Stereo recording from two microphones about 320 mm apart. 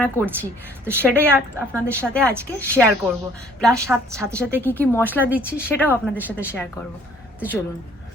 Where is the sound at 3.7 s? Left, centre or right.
Centre.